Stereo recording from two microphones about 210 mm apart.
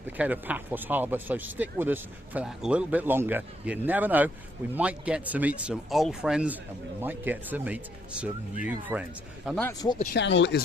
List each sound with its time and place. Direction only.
0.2 s speech: 5° right (ahead or behind)
9.6 s speech: 15° left (ahead or behind)
10.2 s speech: 55° left (ahead or behind)